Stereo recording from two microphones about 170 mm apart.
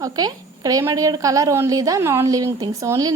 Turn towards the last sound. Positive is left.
turn(degrees=-20)  # may be behind; listen again after turning